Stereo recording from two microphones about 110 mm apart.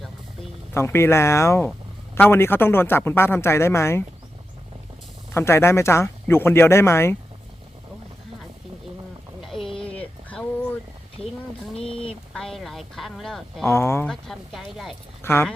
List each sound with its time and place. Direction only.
0.7 s speech: 25° left (ahead or behind)
5.3 s speech: 25° left (ahead or behind)
9.4 s a sound: centre (ahead or behind)
12.3 s a woman's voice: 5° left (ahead or behind)
13.7 s speech: 25° left (ahead or behind)
14.1 s a woman's voice: centre (ahead or behind)
15.2 s speech: 25° left (ahead or behind)